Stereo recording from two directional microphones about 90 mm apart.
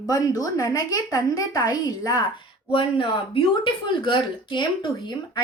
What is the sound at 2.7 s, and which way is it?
Speech, 80° left.